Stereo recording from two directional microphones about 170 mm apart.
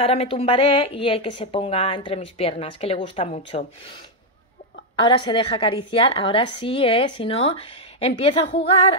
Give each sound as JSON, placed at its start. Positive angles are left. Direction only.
{"t": 0.0, "sound": "speech", "side_deg": 35}
{"t": 4.9, "sound": "speech", "side_deg": 30}